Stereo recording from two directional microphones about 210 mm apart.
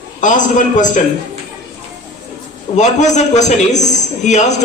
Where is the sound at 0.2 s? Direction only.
35° left (ahead or behind).